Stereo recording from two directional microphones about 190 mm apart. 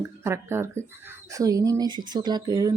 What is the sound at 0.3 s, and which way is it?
Speech, 15° right (ahead or behind).